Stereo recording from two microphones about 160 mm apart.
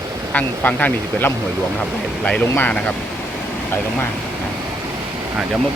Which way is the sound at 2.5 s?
10° left (ahead or behind).